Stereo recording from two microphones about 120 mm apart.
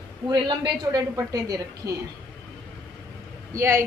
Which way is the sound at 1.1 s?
30° right (ahead or behind).